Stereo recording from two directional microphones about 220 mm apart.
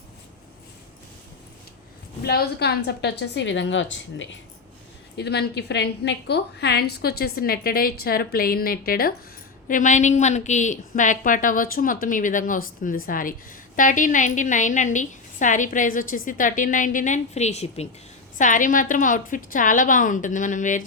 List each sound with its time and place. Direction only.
2.2 s a woman's voice: 45° left (ahead or behind)